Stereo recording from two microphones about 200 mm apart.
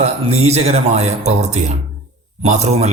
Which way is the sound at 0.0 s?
30° right (ahead or behind).